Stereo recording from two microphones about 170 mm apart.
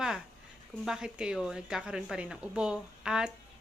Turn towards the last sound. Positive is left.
turn(degrees=-5)  # may be behind; listen again after turning